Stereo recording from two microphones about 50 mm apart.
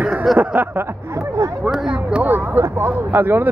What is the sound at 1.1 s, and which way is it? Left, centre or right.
Speech, right.